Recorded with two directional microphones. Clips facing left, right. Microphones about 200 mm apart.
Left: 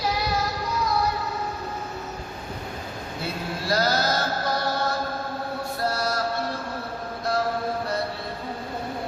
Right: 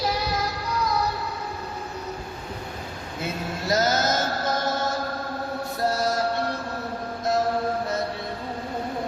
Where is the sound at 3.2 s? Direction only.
20° right (ahead or behind).